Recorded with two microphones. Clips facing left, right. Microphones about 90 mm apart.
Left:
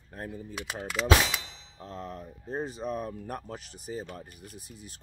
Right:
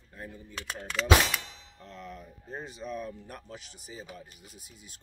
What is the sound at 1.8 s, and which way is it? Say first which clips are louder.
Speech: left 5 dB; 40° left (ahead or behind).